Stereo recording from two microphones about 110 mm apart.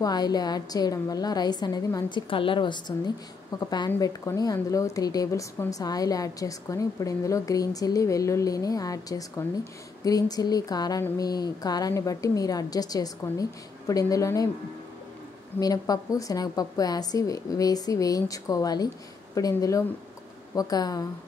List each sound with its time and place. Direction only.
0.0 s a woman's voice: 35° left (ahead or behind)
3.5 s a woman's voice: 35° left (ahead or behind)
9.4 s speech: 20° left (ahead or behind)
10.0 s a woman's voice: 35° left (ahead or behind)
15.6 s a woman's voice: 35° left (ahead or behind)